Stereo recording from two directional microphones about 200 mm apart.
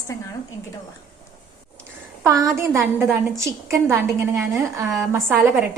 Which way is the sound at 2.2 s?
15° right (ahead or behind).